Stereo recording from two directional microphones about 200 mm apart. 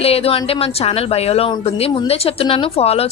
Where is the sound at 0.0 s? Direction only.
30° left (ahead or behind).